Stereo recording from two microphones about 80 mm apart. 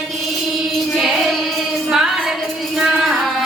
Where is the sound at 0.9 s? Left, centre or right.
Centre.